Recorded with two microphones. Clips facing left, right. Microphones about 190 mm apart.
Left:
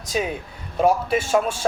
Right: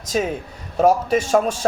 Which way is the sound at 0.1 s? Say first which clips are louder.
Right 3 dB; 40° right (ahead or behind).